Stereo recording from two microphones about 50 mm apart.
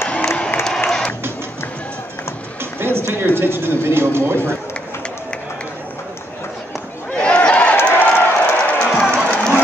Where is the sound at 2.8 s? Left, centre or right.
Right.